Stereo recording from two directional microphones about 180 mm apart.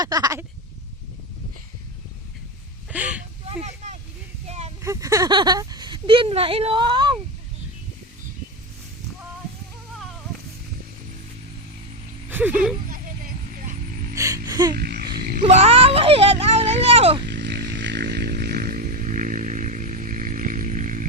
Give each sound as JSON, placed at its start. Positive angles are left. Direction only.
{"t": 0.0, "sound": "speech", "side_deg": -20}
{"t": 2.9, "sound": "a sound", "side_deg": -5}
{"t": 4.4, "sound": "a sound", "side_deg": -35}
{"t": 4.8, "sound": "speech", "side_deg": -15}
{"t": 12.3, "sound": "speech", "side_deg": -10}
{"t": 12.9, "sound": "vehicle", "side_deg": -50}
{"t": 14.4, "sound": "music", "side_deg": -20}
{"t": 14.8, "sound": "a sound", "side_deg": -60}
{"t": 15.4, "sound": "speech", "side_deg": -35}
{"t": 17.2, "sound": "chainsaw", "side_deg": -70}